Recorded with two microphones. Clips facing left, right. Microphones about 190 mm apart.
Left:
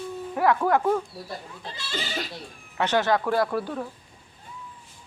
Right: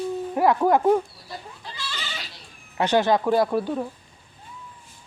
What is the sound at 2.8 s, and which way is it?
Speech, 15° right (ahead or behind).